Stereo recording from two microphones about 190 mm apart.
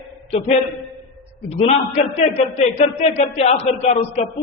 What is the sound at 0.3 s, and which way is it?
A man's voice, 30° left (ahead or behind).